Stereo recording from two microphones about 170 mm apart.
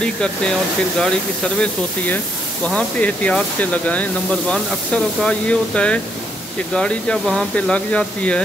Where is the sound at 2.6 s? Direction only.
5° left (ahead or behind).